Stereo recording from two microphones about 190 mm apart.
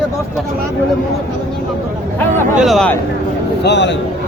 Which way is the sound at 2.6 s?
Centre (ahead or behind).